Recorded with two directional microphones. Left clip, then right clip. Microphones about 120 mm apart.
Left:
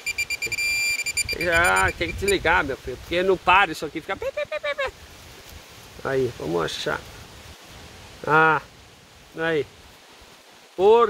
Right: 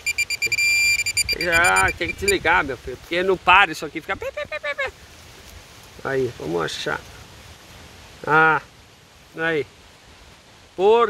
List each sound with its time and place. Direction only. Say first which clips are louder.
0.0 s a sound: right 4 dB; 5° left (ahead or behind)
1.4 s speech: right 2 dB; 30° right (ahead or behind)
3.4 s speech: right 5 dB; 10° right (ahead or behind)
4.5 s a sound: even; 25° right (ahead or behind)
6.0 s speech: right 1 dB; 25° right (ahead or behind)
8.3 s speech: right 2 dB; 20° right (ahead or behind)
10.8 s speech: even; 10° right (ahead or behind)